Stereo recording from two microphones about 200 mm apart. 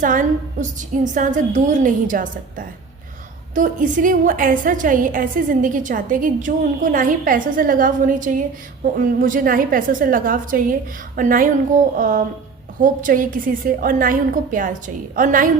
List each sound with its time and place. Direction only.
0.0 s a woman's voice: 40° right (ahead or behind)